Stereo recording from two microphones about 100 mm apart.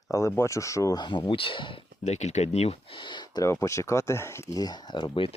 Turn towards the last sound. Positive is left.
turn(degrees=55)  # may be behind; listen again after turning